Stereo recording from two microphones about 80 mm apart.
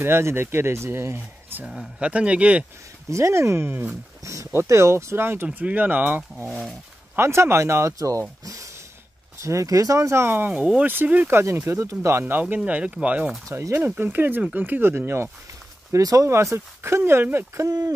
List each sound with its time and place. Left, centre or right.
0.0 s speech: right
2.0 s speech: centre
3.1 s speech: right
4.2 s speech: right
7.2 s speech: right
11.4 s speech: right; by 13.3 s centre
13.5 s speech: right
13.8 s speech: right
15.9 s speech: right
16.3 s speech: right
17.6 s speech: right